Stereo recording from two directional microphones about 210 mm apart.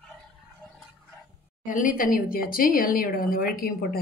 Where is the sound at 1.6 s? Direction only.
40° left (ahead or behind).